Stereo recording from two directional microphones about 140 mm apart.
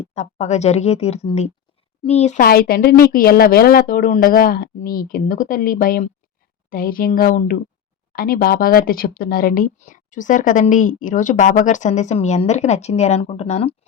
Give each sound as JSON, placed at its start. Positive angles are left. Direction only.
{"t": 0.1, "sound": "speech", "side_deg": 55}
{"t": 2.4, "sound": "speech", "side_deg": 90}
{"t": 6.7, "sound": "speech", "side_deg": 90}
{"t": 8.1, "sound": "speech", "side_deg": 90}